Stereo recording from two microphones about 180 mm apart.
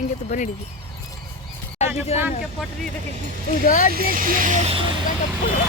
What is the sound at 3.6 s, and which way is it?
Speech, 50° left (ahead or behind).